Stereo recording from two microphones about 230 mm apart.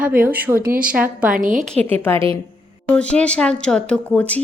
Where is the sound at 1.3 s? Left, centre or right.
Right.